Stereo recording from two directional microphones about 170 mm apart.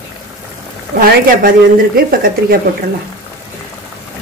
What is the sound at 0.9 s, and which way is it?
Speech, 55° right (ahead or behind).